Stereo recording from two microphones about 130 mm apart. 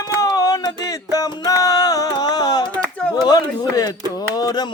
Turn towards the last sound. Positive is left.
turn(degrees=30)  # may be behind; listen again after turning